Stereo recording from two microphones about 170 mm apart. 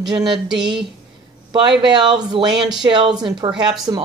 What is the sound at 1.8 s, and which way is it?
Speech, 25° right (ahead or behind).